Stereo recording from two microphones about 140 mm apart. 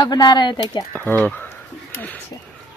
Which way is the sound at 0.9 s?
10° left (ahead or behind).